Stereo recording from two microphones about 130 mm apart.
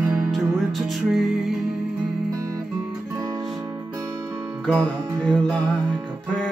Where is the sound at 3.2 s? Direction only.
25° right (ahead or behind).